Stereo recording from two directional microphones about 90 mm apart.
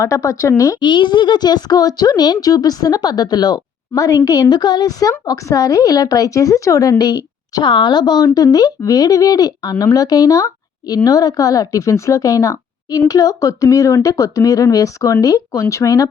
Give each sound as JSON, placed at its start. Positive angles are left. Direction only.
{"t": 0.0, "sound": "a woman's voice", "side_deg": 35}
{"t": 0.8, "sound": "a woman's voice", "side_deg": 55}
{"t": 7.5, "sound": "a woman's voice", "side_deg": 60}